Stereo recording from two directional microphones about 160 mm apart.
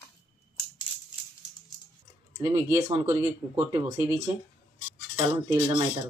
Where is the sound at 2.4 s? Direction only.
20° right (ahead or behind).